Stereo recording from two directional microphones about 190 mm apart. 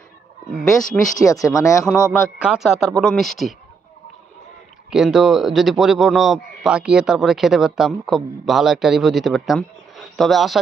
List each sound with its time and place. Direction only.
0.7 s a man's voice: centre (ahead or behind)
1.2 s speech: 15° left (ahead or behind)
2.4 s a man's voice: 5° right (ahead or behind)
4.9 s a man's voice: centre (ahead or behind)